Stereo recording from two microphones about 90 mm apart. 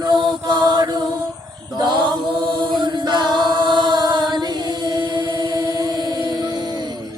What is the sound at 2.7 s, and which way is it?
A capella, 55° right (ahead or behind).